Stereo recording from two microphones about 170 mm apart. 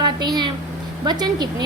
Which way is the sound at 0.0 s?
25° right (ahead or behind).